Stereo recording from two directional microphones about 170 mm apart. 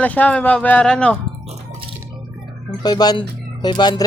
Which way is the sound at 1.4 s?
35° right (ahead or behind).